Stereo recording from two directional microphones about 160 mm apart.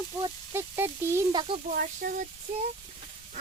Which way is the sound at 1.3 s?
30° right (ahead or behind).